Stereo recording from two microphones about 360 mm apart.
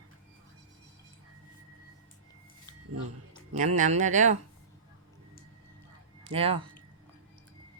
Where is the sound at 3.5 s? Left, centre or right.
Centre.